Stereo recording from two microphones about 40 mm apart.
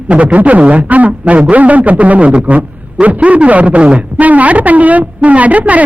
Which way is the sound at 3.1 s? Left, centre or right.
Right.